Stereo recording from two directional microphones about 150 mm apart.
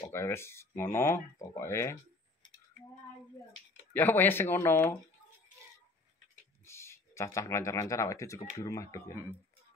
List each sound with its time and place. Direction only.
0.1 s speech: 15° left (ahead or behind)
3.9 s speech: 15° left (ahead or behind)
6.6 s speech: 20° left (ahead or behind)